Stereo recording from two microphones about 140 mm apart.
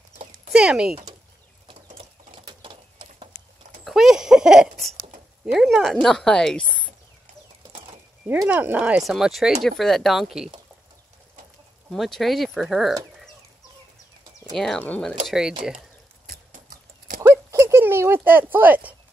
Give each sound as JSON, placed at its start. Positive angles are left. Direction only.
{"t": 0.5, "sound": "speech", "side_deg": -5}
{"t": 2.0, "sound": "horse", "side_deg": -40}
{"t": 3.8, "sound": "a sound", "side_deg": 0}
{"t": 5.4, "sound": "speech", "side_deg": -5}
{"t": 8.5, "sound": "speech", "side_deg": -10}
{"t": 11.9, "sound": "speech", "side_deg": 0}
{"t": 14.5, "sound": "speech", "side_deg": 0}
{"t": 15.2, "sound": "speech", "side_deg": -5}
{"t": 16.3, "sound": "a sound", "side_deg": -90}
{"t": 17.3, "sound": "a sound", "side_deg": -20}